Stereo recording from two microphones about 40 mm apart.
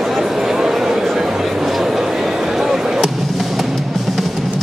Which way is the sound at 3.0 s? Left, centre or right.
Centre.